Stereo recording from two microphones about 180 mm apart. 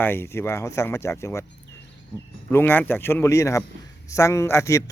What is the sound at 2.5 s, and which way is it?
A man's voice, 10° left (ahead or behind).